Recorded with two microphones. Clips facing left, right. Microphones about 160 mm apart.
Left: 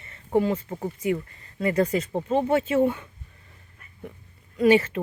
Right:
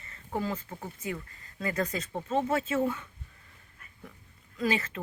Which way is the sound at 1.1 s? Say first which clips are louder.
Left 11 dB; 30° left (ahead or behind).